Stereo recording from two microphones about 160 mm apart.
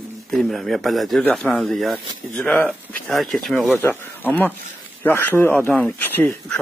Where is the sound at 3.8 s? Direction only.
15° left (ahead or behind).